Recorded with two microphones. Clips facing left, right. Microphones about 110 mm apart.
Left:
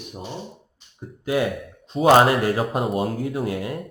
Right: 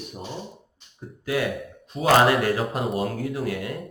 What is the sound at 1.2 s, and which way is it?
Speech, 25° left (ahead or behind).